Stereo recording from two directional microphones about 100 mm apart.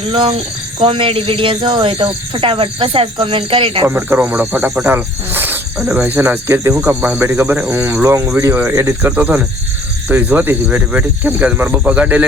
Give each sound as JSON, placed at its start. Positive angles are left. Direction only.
{"t": 0.1, "sound": "speech", "side_deg": -55}
{"t": 3.8, "sound": "speech", "side_deg": -20}
{"t": 8.0, "sound": "speech", "side_deg": -30}